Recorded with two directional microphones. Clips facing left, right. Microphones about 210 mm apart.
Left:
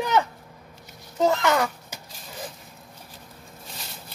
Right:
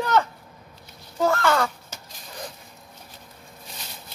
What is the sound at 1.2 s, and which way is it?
Caw, 20° left (ahead or behind).